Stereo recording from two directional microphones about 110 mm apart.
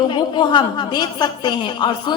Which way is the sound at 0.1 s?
45° left (ahead or behind).